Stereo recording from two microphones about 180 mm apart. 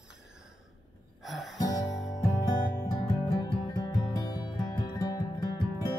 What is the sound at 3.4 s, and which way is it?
Music, 25° left (ahead or behind).